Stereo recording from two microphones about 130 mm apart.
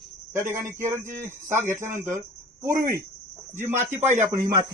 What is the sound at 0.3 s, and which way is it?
Speech, 20° right (ahead or behind).